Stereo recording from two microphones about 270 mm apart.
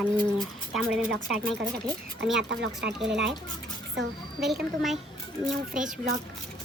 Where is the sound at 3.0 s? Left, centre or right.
Centre.